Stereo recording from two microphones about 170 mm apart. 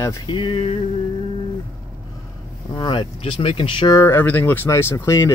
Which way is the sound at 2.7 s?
25° left (ahead or behind).